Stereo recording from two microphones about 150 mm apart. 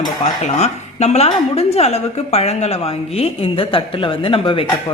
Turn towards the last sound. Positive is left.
turn(degrees=35)  # may be behind; listen again after turning